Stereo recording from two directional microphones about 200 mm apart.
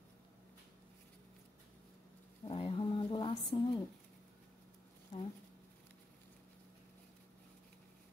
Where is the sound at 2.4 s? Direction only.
25° left (ahead or behind).